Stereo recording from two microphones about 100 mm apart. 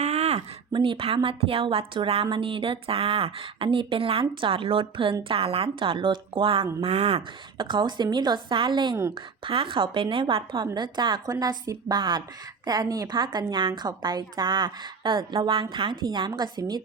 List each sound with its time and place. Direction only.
0.0 s a sound: 90° right
0.7 s speech: 60° right (ahead or behind)
5.8 s speech: 60° right (ahead or behind)
6.8 s a woman's voice: 85° right; by 9.0 s 50° right (ahead or behind)
9.1 s a woman's voice: 60° right (ahead or behind)
15.3 s a woman's voice: 65° right (ahead or behind); by 16.8 s 45° right (ahead or behind)